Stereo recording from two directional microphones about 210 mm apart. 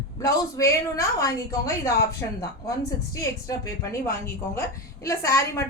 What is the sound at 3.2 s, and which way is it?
A woman's voice, 15° left (ahead or behind).